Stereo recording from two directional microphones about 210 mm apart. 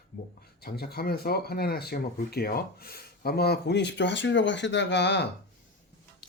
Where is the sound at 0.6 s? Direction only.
45° left (ahead or behind).